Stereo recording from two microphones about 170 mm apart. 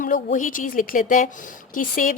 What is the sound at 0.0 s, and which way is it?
A woman's voice, 50° left (ahead or behind).